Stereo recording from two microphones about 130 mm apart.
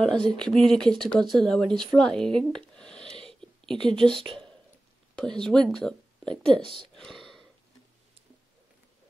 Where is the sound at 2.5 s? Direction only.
5° left (ahead or behind).